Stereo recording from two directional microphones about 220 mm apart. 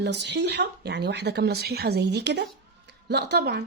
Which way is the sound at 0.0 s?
50° right (ahead or behind).